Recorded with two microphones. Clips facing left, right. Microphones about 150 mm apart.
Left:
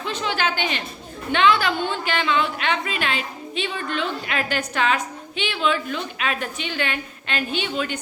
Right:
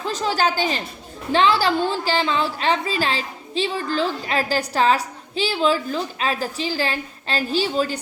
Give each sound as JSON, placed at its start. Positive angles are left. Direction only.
{"t": 0.0, "sound": "a woman's voice", "side_deg": -40}